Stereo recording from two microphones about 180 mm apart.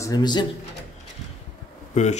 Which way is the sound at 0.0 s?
20° left (ahead or behind).